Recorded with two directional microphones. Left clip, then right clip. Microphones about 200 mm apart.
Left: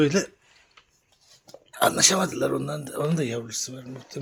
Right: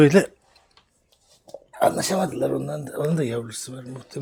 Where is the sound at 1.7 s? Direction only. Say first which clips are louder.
Even; 10° right (ahead or behind).